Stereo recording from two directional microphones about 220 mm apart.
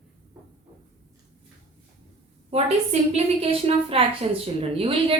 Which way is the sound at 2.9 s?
30° right (ahead or behind).